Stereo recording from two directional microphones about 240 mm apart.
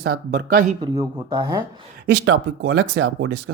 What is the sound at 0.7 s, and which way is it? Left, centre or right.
A man's voice, centre.